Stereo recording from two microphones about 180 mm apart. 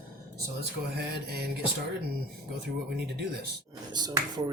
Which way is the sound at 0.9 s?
60° right (ahead or behind).